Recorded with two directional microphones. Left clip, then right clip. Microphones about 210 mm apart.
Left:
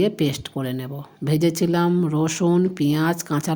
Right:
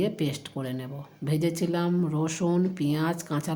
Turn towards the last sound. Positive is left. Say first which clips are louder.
# left 7 dB
turn(degrees=30)  # may be behind; listen again after turning